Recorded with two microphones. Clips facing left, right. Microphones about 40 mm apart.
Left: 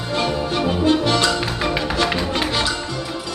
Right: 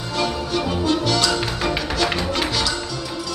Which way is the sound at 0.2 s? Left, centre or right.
Left.